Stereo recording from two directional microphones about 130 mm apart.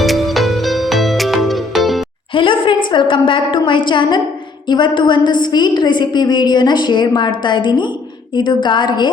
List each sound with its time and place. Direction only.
0.0 s music: centre (ahead or behind)
2.3 s a woman's voice: 40° left (ahead or behind)